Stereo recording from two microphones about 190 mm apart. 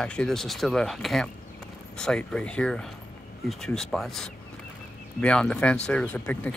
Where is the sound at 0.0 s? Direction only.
5° left (ahead or behind).